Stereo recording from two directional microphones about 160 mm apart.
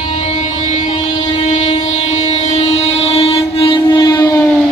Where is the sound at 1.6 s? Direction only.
45° left (ahead or behind).